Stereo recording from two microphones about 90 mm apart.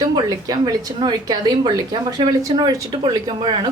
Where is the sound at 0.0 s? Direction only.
50° right (ahead or behind).